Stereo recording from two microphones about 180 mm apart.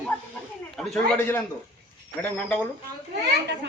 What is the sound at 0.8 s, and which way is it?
A man's voice, 5° left (ahead or behind).